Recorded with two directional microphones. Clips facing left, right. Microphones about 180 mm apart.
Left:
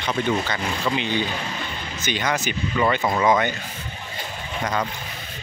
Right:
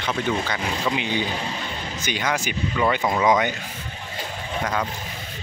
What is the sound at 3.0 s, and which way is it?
Speech, centre (ahead or behind).